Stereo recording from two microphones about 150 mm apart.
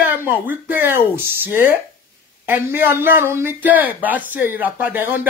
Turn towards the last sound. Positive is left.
turn(degrees=-15)  # may be behind; listen again after turning